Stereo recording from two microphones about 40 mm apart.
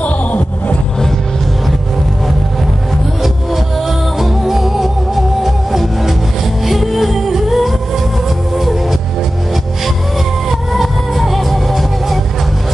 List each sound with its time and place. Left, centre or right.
0.0 s music: left
4.2 s music: centre
10.7 s music: centre